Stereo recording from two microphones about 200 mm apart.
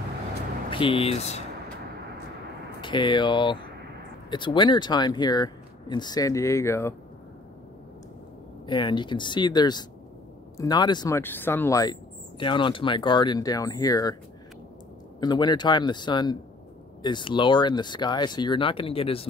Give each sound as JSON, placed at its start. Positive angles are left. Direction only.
{"t": 0.7, "sound": "speech", "side_deg": 25}
{"t": 2.8, "sound": "speech", "side_deg": 25}
{"t": 8.6, "sound": "speech", "side_deg": 25}
{"t": 15.1, "sound": "speech", "side_deg": 20}